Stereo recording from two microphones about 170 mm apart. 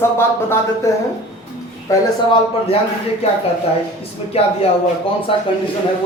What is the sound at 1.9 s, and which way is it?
Speech, 20° left (ahead or behind).